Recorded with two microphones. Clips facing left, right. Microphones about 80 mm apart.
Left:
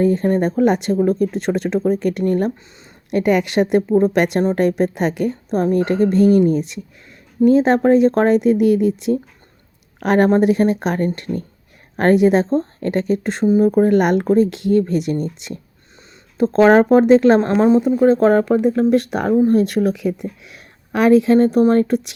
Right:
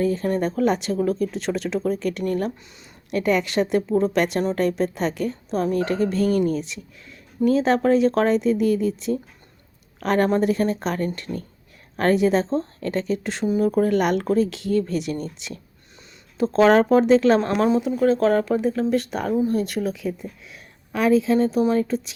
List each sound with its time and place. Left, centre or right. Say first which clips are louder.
0.0 s a woman's voice: left 6 dB; left
3.1 s a woman's voice: left 5 dB; left
8.4 s a woman's voice: left 6 dB; left
17.4 s a woman's voice: left 6 dB; left